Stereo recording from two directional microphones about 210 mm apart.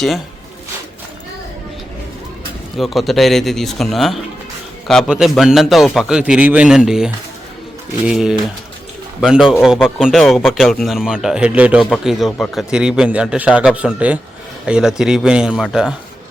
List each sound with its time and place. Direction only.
2.7 s speech: centre (ahead or behind)